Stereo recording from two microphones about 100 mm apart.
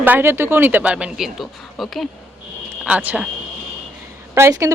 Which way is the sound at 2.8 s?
15° right (ahead or behind).